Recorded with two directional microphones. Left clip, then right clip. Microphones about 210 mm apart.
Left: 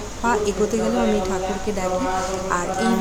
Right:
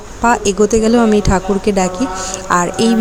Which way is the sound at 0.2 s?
35° right (ahead or behind).